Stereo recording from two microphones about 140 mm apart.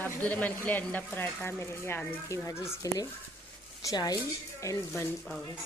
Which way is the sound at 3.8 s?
25° left (ahead or behind).